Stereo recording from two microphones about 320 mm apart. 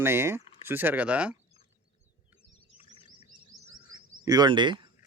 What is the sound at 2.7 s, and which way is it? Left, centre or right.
Bird vocalization, centre.